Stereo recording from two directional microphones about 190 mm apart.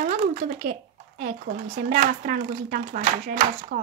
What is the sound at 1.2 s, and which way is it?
Speech, 45° right (ahead or behind).